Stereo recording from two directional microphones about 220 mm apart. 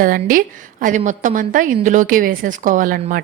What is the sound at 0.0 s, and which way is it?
Speech, 40° right (ahead or behind).